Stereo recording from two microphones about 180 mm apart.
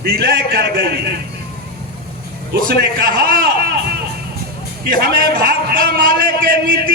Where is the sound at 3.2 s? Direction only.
55° right (ahead or behind).